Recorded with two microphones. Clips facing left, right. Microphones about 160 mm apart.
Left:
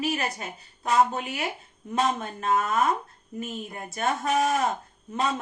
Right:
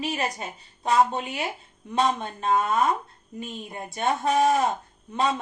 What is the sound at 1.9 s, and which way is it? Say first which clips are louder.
Speech: right 2 dB; 30° right (ahead or behind).